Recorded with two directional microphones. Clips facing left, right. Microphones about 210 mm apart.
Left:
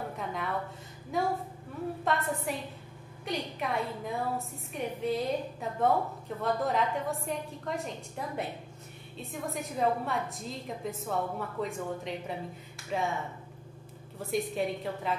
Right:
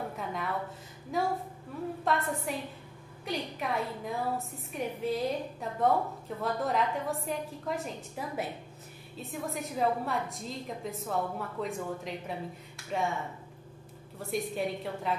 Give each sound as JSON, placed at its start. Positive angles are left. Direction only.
{"t": 0.2, "sound": "a woman's voice", "side_deg": 0}
{"t": 14.1, "sound": "a woman's voice", "side_deg": 0}